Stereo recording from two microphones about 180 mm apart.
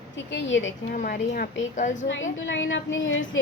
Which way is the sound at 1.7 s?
40° left (ahead or behind).